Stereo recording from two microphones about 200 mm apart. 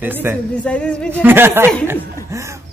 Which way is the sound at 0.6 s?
5° left (ahead or behind).